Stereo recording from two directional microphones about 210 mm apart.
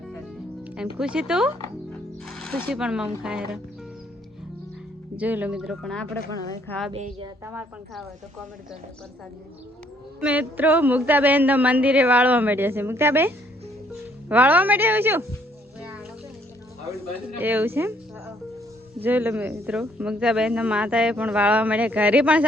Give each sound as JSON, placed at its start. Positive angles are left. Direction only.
{"t": 0.9, "sound": "speech", "side_deg": -5}
{"t": 5.1, "sound": "speech", "side_deg": -10}
{"t": 6.9, "sound": "a woman's voice", "side_deg": -30}
{"t": 7.4, "sound": "speech", "side_deg": -10}
{"t": 10.2, "sound": "speech", "side_deg": -5}
{"t": 17.4, "sound": "speech", "side_deg": -10}